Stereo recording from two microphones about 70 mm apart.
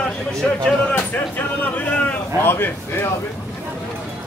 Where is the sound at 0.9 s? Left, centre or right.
Left.